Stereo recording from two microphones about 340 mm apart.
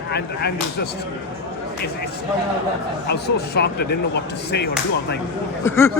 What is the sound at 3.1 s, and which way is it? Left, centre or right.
Speech, left.